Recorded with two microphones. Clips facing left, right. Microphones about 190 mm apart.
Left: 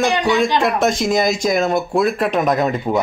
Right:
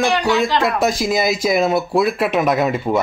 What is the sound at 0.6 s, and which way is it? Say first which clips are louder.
Speech: left 1 dB; centre (ahead or behind).